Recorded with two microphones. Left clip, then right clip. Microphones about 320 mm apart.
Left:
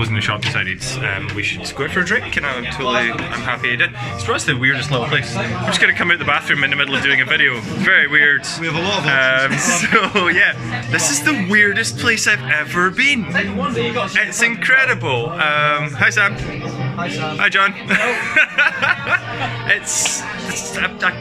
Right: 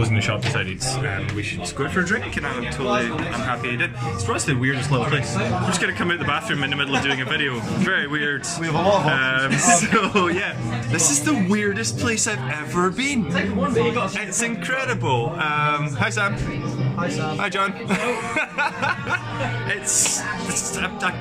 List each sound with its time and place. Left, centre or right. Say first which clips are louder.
0.2 s speech: left 5 dB; centre
8.6 s speech: right 3 dB; right
9.0 s speech: left 6 dB; centre
17.4 s speech: left 10 dB; centre